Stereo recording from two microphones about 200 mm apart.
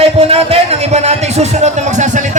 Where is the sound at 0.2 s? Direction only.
30° right (ahead or behind).